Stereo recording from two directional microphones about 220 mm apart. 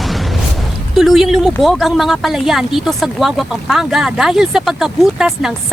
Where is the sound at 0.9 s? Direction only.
Centre (ahead or behind).